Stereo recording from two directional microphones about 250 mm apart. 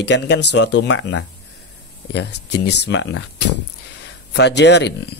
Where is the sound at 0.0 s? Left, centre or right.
Left.